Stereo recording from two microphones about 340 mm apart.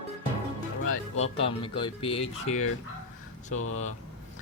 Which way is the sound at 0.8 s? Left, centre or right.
Left.